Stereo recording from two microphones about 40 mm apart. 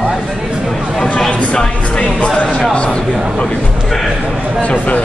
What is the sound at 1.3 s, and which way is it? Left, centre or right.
Speech, left.